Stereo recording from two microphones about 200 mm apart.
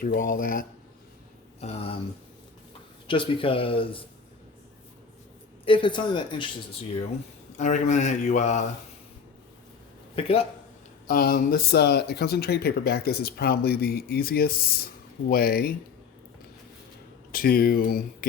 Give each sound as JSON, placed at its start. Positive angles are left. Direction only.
{"t": 0.0, "sound": "speech", "side_deg": 45}
{"t": 1.6, "sound": "a man's voice", "side_deg": 30}
{"t": 3.1, "sound": "a man's voice", "side_deg": 25}
{"t": 5.6, "sound": "a man's voice", "side_deg": 25}
{"t": 7.5, "sound": "speech", "side_deg": 35}
{"t": 10.2, "sound": "a man's voice", "side_deg": 30}
{"t": 11.1, "sound": "speech", "side_deg": 50}
{"t": 17.3, "sound": "speech", "side_deg": 45}